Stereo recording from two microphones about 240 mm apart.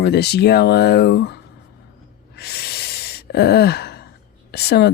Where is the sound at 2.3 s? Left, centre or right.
Left.